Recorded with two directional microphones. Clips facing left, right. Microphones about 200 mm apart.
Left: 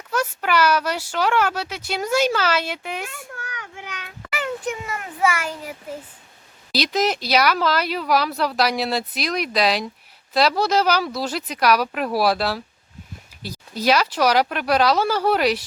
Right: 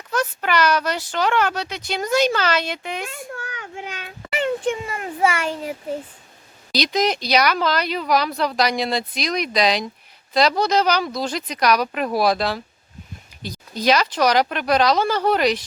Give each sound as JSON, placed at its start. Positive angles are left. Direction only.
{"t": 0.1, "sound": "a child's voice", "side_deg": 10}
{"t": 3.1, "sound": "children playing", "side_deg": -25}
{"t": 6.7, "sound": "a child's voice", "side_deg": 5}